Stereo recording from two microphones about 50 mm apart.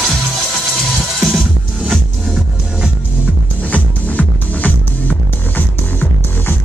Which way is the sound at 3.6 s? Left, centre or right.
Left.